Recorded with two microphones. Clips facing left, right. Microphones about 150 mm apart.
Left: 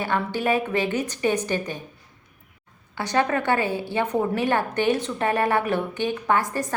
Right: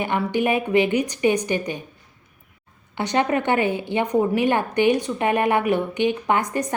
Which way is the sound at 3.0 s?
20° right (ahead or behind).